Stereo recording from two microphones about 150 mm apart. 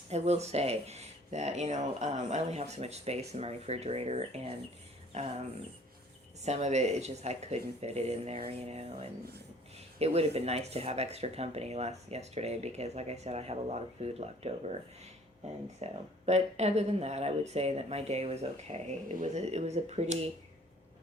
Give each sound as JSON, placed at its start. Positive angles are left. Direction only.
{"t": 0.1, "sound": "speech", "side_deg": -45}
{"t": 6.4, "sound": "speech", "side_deg": -50}
{"t": 15.8, "sound": "speech", "side_deg": -45}